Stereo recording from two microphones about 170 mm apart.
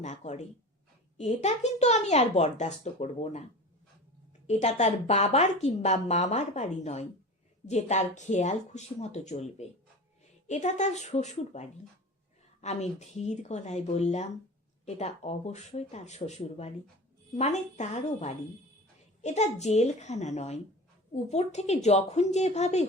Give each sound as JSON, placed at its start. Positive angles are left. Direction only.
{"t": 0.0, "sound": "a woman's voice", "side_deg": 45}
{"t": 4.4, "sound": "a woman's voice", "side_deg": 40}